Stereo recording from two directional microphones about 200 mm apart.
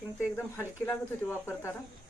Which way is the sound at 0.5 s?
10° left (ahead or behind).